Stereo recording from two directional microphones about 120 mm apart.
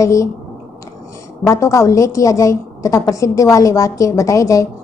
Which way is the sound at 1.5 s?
25° left (ahead or behind).